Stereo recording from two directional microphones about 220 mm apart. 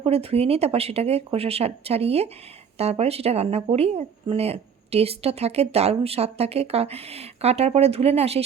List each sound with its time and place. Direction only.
0.0 s speech: 25° right (ahead or behind)